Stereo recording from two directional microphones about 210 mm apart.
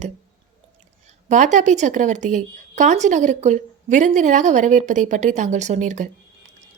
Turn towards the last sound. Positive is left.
turn(degrees=-35)  # may be behind; listen again after turning